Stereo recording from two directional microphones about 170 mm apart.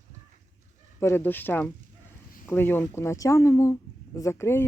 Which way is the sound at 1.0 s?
15° left (ahead or behind).